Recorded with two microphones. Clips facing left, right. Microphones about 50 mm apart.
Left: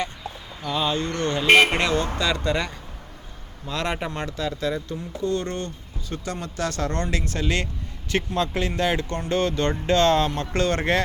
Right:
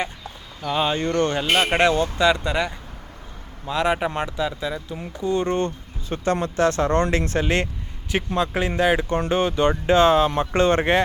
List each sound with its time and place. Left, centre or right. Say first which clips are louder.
0.8 s speech: right 4 dB; right
1.5 s speech: left 4 dB; left
2.1 s speech: right 4 dB; right
5.5 s speech: right 7 dB; right
8.1 s speech: right 2 dB; centre